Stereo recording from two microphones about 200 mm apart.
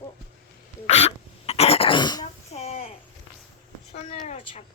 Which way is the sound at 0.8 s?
30° left (ahead or behind).